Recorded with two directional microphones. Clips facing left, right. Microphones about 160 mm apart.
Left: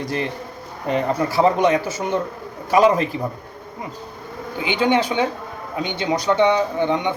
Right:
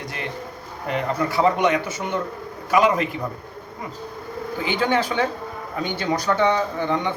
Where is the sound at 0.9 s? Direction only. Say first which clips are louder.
Left 3 dB; 30° left (ahead or behind).